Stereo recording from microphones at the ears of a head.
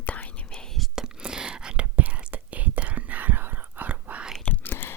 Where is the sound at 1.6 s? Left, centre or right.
Right.